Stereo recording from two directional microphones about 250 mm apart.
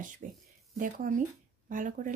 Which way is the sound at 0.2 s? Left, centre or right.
Right.